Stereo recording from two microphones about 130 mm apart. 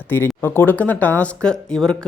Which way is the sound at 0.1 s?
15° left (ahead or behind).